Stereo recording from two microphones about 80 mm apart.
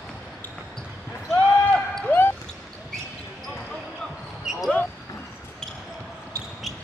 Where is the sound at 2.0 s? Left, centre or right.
Left.